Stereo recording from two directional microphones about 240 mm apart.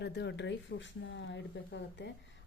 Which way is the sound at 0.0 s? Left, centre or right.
Left.